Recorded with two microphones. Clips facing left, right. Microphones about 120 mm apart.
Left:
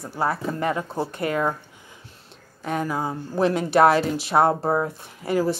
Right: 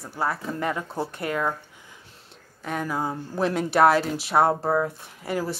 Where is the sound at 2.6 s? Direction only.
10° left (ahead or behind).